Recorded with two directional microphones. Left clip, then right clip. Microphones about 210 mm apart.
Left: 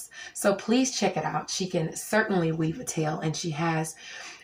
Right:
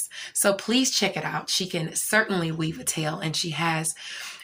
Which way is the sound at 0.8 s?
5° left (ahead or behind).